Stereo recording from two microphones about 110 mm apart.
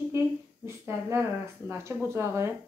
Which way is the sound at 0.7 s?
25° right (ahead or behind).